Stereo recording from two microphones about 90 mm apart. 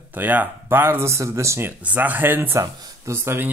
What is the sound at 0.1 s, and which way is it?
Speech, 20° right (ahead or behind).